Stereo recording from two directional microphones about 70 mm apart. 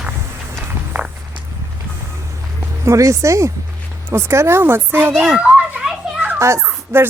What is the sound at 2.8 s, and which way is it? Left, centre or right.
A woman's voice, right.